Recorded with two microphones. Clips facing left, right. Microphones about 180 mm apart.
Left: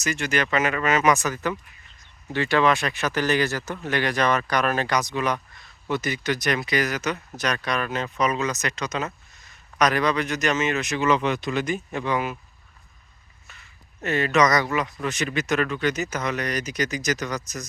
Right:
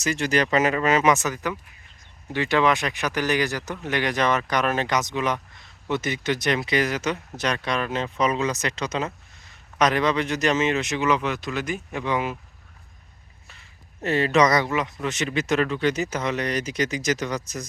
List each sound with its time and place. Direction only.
0.0 s speech: 30° right (ahead or behind)
11.0 s speech: 10° right (ahead or behind); by 12.4 s 25° right (ahead or behind)
14.0 s speech: 30° right (ahead or behind)